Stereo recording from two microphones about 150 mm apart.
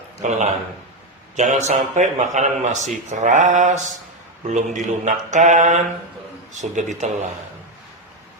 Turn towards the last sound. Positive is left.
turn(degrees=-55)  # may be behind; listen again after turning